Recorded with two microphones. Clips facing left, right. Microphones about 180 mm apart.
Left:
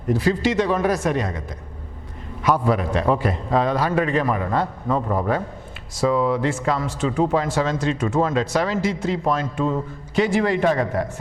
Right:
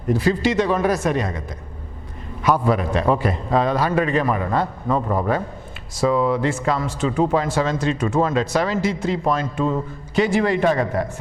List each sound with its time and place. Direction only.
0.1 s a man's voice: 15° right (ahead or behind)